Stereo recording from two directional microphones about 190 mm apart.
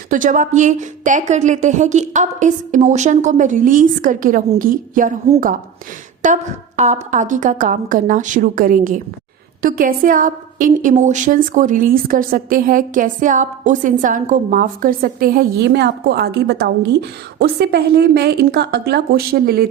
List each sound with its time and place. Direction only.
0.1 s a woman's voice: 45° right (ahead or behind)
6.2 s a woman's voice: 40° right (ahead or behind)